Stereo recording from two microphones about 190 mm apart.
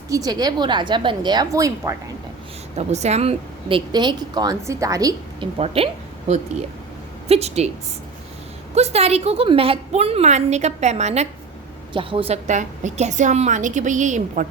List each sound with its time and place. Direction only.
0.1 s a woman's voice: 20° right (ahead or behind)
2.7 s a woman's voice: 35° right (ahead or behind); by 5.5 s 20° right (ahead or behind)
5.5 s a woman's voice: 30° right (ahead or behind)
8.7 s a woman's voice: 35° right (ahead or behind)